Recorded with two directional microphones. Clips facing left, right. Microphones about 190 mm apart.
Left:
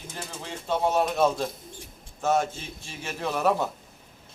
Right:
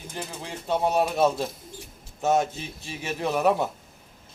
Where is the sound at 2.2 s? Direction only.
20° right (ahead or behind).